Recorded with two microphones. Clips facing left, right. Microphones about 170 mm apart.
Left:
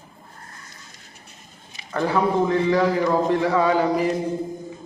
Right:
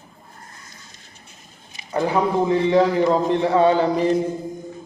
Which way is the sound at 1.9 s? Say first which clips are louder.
Right 1 dB; 20° right (ahead or behind).